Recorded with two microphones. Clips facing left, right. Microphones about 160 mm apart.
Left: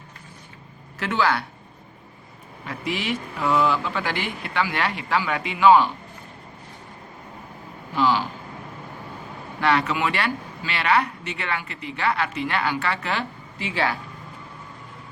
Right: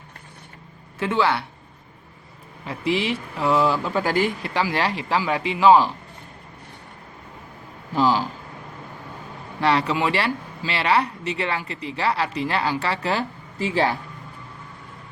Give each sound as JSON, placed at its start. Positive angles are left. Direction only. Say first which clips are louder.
{"t": 0.9, "sound": "speech", "louder": "right 2 dB", "side_deg": -25}
{"t": 2.6, "sound": "speech", "louder": "right 4 dB", "side_deg": -30}
{"t": 7.9, "sound": "speech", "louder": "right 1 dB", "side_deg": -35}
{"t": 9.6, "sound": "speech", "louder": "right 1 dB", "side_deg": -30}